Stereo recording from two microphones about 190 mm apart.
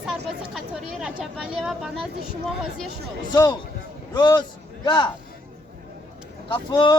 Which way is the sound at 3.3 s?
20° left (ahead or behind).